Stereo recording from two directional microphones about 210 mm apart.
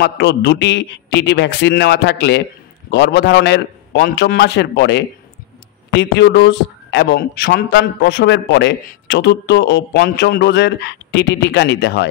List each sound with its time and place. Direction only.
0.0 s speech: 55° left (ahead or behind)